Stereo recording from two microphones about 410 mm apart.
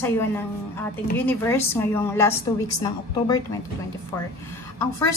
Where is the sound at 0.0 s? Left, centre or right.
Centre.